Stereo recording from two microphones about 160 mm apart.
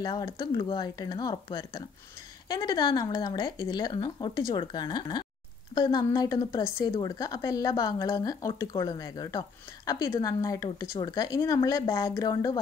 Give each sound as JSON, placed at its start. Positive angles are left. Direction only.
{"t": 0.0, "sound": "a woman's voice", "side_deg": 25}